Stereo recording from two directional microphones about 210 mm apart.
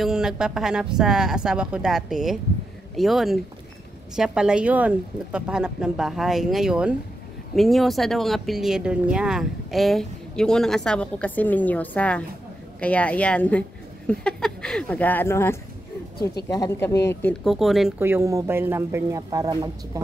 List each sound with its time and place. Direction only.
0.0 s speech: 5° right (ahead or behind)
16.5 s speech: 15° left (ahead or behind); by 19.5 s 15° right (ahead or behind)